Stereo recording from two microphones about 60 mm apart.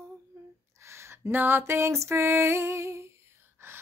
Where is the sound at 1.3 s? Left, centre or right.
Right.